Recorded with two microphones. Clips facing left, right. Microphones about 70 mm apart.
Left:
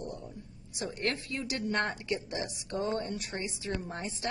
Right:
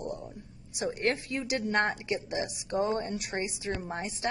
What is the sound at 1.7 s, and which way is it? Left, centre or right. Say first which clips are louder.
A man's voice: right 3 dB; right.